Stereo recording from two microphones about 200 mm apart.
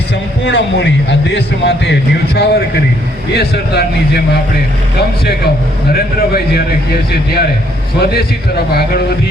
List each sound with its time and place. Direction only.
0.4 s a man's voice: 60° left (ahead or behind)
5.9 s a man's voice: 50° left (ahead or behind)